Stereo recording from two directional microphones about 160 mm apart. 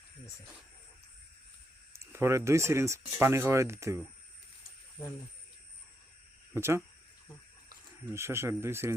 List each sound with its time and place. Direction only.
1.9 s speech: 15° right (ahead or behind)
6.5 s speech: 15° right (ahead or behind)
8.0 s speech: 15° right (ahead or behind)